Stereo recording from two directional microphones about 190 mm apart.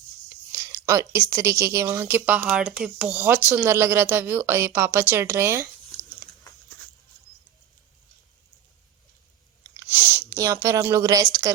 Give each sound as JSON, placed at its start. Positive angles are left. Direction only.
{"t": 0.3, "sound": "a woman's voice", "side_deg": -15}
{"t": 9.7, "sound": "speech", "side_deg": -10}